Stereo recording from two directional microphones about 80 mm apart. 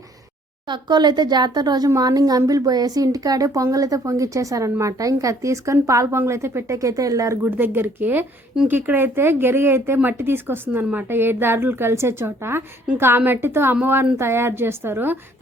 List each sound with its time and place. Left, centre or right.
0.7 s a woman's voice: right
7.4 s speech: right